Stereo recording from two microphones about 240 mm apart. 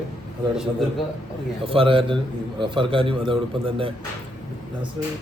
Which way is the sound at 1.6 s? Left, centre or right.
Right.